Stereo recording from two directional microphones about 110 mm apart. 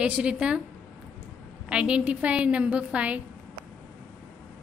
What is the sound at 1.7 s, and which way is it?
A woman's voice, 10° right (ahead or behind).